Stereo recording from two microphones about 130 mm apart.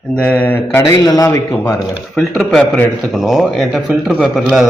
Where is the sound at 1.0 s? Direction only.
30° left (ahead or behind).